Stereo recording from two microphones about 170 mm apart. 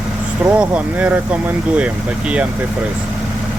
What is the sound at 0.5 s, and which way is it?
Speech, 10° right (ahead or behind).